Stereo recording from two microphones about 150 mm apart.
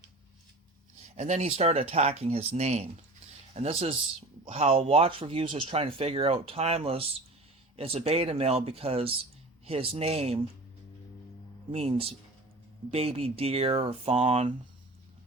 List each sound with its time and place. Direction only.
1.1 s speech: 50° right (ahead or behind)
11.7 s speech: 40° right (ahead or behind)